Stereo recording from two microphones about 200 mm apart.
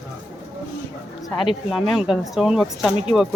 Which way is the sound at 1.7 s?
Centre (ahead or behind).